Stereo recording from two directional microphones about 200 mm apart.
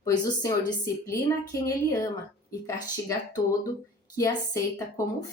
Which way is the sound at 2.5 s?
15° left (ahead or behind).